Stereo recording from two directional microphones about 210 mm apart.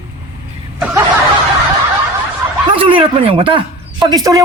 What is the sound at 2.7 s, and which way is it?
Speech, 25° right (ahead or behind).